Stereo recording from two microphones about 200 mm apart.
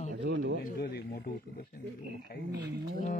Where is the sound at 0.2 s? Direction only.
65° right (ahead or behind).